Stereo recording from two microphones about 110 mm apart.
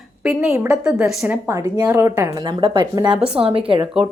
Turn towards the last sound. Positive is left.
turn(degrees=-55)  # may be behind; listen again after turning